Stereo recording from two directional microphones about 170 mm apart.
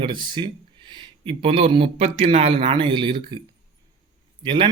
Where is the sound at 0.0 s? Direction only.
25° right (ahead or behind).